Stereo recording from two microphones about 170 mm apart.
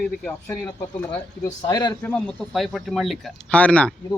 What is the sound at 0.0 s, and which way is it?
Speech, 10° left (ahead or behind).